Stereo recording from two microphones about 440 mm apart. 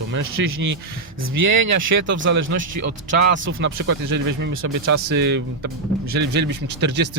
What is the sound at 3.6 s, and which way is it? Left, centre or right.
Speech, right.